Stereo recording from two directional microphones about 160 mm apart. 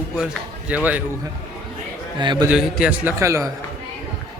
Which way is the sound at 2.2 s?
30° right (ahead or behind).